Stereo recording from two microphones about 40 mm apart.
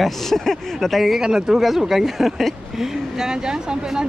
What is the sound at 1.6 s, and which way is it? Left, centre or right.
Speech, centre.